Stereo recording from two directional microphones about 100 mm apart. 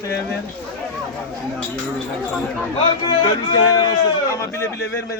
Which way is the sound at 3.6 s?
35° left (ahead or behind).